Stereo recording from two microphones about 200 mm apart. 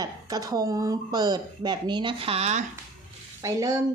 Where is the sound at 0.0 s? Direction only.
20° right (ahead or behind).